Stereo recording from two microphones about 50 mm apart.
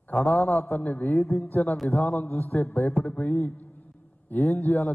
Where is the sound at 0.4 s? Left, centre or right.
Centre.